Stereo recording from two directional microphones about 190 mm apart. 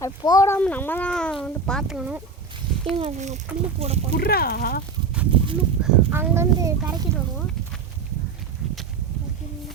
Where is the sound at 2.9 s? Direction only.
35° right (ahead or behind).